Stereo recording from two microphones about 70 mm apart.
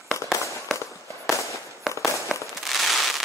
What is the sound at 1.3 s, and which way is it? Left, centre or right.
Fireworks, left.